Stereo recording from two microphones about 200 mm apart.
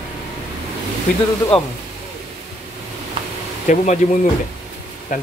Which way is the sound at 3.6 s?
40° left (ahead or behind).